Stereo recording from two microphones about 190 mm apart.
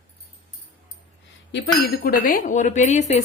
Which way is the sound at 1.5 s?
55° left (ahead or behind).